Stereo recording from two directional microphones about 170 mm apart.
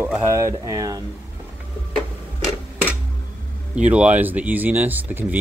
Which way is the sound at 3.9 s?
10° right (ahead or behind).